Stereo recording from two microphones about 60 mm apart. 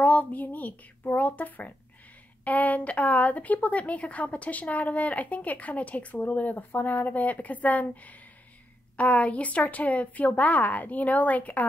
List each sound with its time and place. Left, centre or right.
0.0 s speech: left